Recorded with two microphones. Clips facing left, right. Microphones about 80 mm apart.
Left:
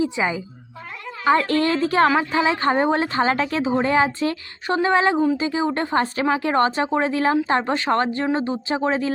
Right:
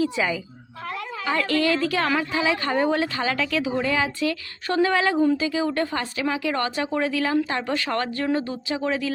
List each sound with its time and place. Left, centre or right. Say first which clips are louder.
0.0 s a woman's voice: left 1 dB; left